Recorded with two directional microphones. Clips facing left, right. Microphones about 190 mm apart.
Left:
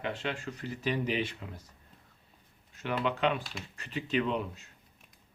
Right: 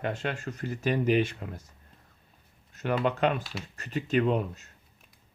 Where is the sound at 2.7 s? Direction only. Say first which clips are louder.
Right 4 dB; 45° right (ahead or behind).